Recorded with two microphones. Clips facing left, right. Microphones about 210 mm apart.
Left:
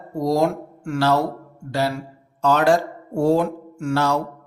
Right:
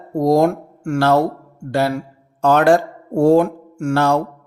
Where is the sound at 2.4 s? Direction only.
55° right (ahead or behind).